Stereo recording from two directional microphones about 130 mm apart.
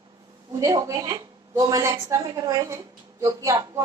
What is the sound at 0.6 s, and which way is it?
A woman's voice, 25° right (ahead or behind).